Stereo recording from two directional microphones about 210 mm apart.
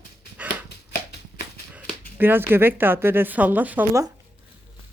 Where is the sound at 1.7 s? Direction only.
5° right (ahead or behind).